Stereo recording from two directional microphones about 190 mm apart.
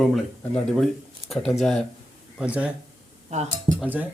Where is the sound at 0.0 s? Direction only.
Centre (ahead or behind).